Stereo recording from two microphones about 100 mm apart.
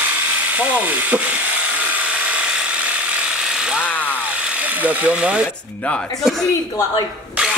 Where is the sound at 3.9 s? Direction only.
20° left (ahead or behind).